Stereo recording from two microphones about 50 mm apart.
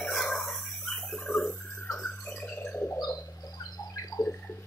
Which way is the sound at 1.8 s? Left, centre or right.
Left.